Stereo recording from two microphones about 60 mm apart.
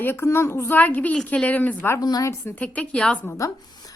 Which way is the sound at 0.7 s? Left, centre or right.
Left.